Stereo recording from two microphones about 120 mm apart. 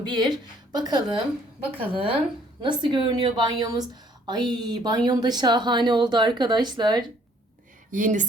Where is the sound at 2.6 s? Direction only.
45° right (ahead or behind).